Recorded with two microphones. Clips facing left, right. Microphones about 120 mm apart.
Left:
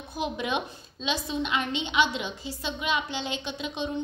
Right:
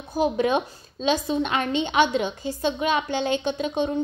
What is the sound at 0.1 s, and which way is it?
A woman's voice, 40° right (ahead or behind).